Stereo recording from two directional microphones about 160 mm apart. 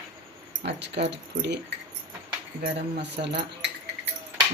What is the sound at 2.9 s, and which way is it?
Speech, 90° right.